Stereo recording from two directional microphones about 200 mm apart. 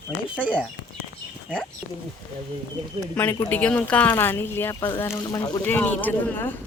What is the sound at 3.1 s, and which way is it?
Speech, 10° left (ahead or behind).